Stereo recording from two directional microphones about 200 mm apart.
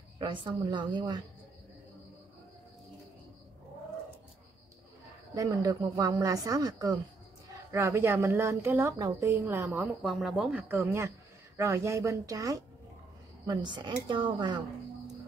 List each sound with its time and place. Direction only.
0.2 s speech: 25° right (ahead or behind)
5.3 s speech: 15° right (ahead or behind)
9.7 s speech: centre (ahead or behind); by 14.6 s 25° right (ahead or behind)